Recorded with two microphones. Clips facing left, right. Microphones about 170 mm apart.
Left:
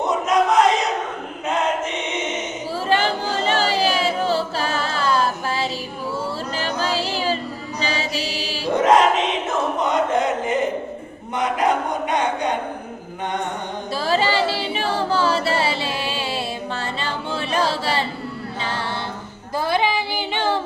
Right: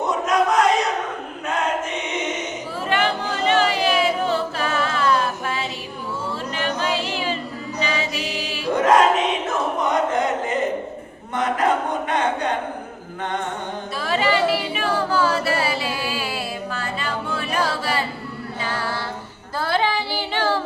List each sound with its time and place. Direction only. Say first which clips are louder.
0.0 s battle cry: left 1 dB; 20° left (ahead or behind)
2.9 s singing: left 1 dB; 30° left (ahead or behind)
6.6 s music: even; 35° left (ahead or behind)
9.9 s chant: left 1 dB; 20° left (ahead or behind)
12.1 s a sound: even; 15° left (ahead or behind)
13.9 s singing: left 1 dB; 30° left (ahead or behind)
18.6 s music: right 1 dB; 25° left (ahead or behind)
19.5 s child singing: left 1 dB; 15° left (ahead or behind)